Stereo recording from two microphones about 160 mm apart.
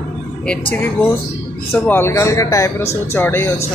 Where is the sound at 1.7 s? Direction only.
15° left (ahead or behind).